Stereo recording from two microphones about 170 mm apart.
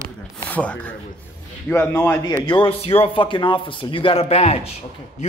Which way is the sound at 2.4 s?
30° left (ahead or behind).